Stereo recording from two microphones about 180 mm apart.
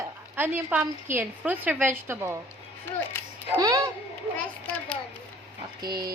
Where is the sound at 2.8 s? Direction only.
10° left (ahead or behind).